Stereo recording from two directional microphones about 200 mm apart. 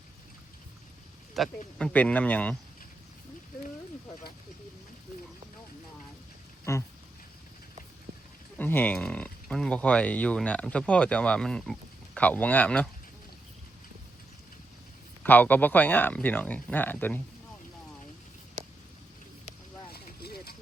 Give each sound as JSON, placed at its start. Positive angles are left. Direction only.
{"t": 1.4, "sound": "speech", "side_deg": 0}
{"t": 6.7, "sound": "speech", "side_deg": 15}
{"t": 8.5, "sound": "speech", "side_deg": 10}
{"t": 15.2, "sound": "speech", "side_deg": 10}
{"t": 19.9, "sound": "vehicle", "side_deg": 50}